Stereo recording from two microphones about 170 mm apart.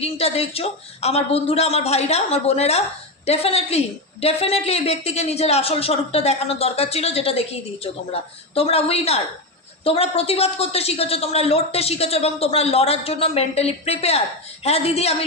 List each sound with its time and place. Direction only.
0.0 s a woman's voice: 35° left (ahead or behind)
8.5 s a woman's voice: 35° left (ahead or behind)